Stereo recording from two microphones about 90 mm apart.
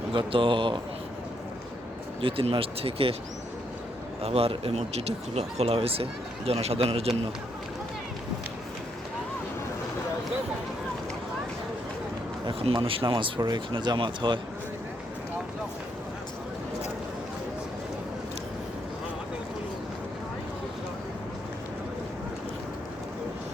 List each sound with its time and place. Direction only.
0.1 s speech: 75° right (ahead or behind)
2.2 s speech: 85° right
4.2 s speech: 90° right
12.5 s speech: 80° right
13.4 s speech: 55° right (ahead or behind)